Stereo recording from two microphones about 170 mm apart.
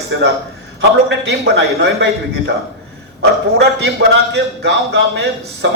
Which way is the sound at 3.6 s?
75° right (ahead or behind).